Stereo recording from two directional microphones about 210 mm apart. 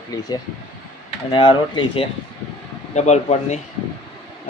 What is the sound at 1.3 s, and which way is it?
Cutlery, 20° left (ahead or behind).